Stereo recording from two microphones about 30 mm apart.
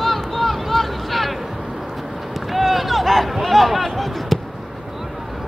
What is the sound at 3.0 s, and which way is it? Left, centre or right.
Speech, centre.